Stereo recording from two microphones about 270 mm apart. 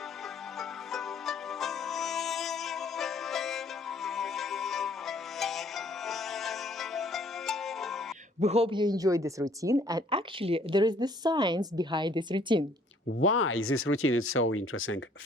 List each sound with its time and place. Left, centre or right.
0.9 s music: centre
8.4 s speech: right
13.1 s speech: left